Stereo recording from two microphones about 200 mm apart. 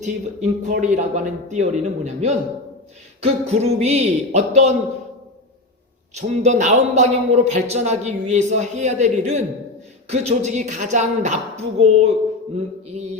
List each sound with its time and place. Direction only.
0.0 s speech: 35° right (ahead or behind)
6.1 s speech: 35° right (ahead or behind)